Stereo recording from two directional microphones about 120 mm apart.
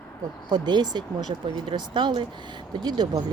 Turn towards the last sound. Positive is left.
turn(degrees=-35)  # may be behind; listen again after turning